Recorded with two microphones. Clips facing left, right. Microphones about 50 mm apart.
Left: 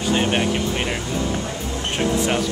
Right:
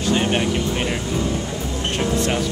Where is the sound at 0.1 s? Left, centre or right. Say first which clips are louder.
Even; centre.